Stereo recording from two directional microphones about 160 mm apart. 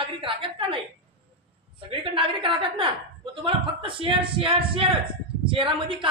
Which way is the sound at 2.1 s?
30° right (ahead or behind).